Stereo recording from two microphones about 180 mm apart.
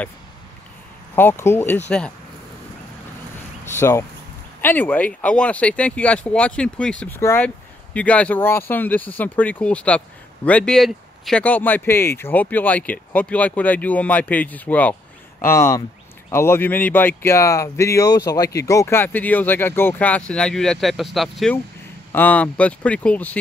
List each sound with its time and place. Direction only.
1.1 s speech: 15° left (ahead or behind)
3.6 s speech: 15° left (ahead or behind)